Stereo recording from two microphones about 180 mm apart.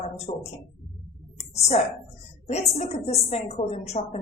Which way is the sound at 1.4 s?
35° left (ahead or behind).